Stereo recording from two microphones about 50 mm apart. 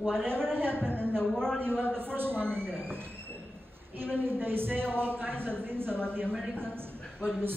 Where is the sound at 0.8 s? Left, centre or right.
Centre.